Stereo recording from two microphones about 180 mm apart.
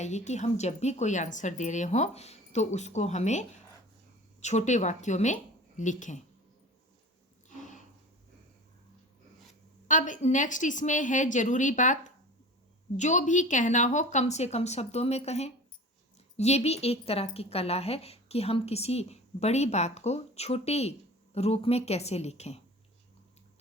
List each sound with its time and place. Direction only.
0.0 s a woman's voice: 40° left (ahead or behind)
7.4 s a sound: 45° left (ahead or behind)
9.8 s a woman's voice: 45° left (ahead or behind)